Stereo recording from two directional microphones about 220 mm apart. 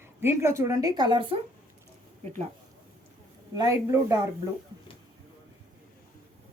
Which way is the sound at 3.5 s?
15° right (ahead or behind).